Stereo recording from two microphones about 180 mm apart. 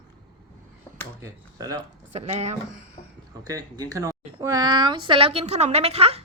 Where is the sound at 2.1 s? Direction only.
35° right (ahead or behind).